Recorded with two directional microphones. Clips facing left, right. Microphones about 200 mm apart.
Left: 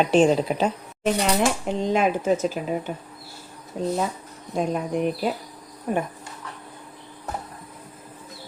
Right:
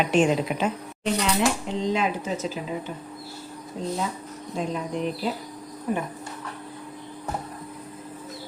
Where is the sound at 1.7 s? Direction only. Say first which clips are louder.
Left 3 dB; 50° left (ahead or behind).